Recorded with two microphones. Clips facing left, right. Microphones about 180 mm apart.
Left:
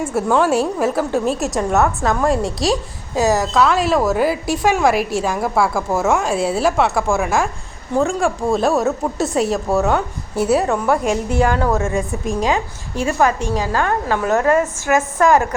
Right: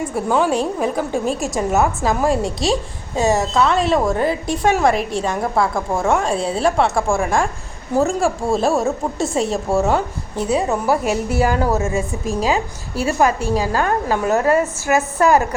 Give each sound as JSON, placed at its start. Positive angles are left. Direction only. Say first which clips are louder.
{"t": 0.0, "sound": "a woman's voice", "louder": "left 2 dB", "side_deg": 5}
{"t": 14.3, "sound": "a woman's voice", "louder": "left 1 dB", "side_deg": -30}